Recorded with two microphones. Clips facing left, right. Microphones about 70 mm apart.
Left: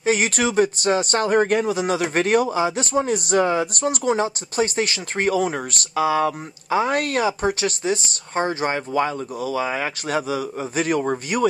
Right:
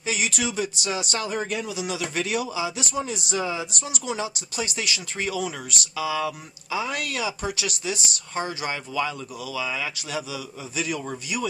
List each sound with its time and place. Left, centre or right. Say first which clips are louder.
0.0 s speech: left 7 dB; left